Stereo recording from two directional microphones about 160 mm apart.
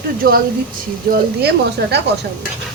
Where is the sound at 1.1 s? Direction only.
90° right.